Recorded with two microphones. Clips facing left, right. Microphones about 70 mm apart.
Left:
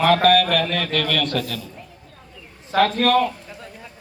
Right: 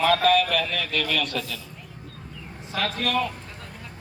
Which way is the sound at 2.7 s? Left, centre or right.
Left.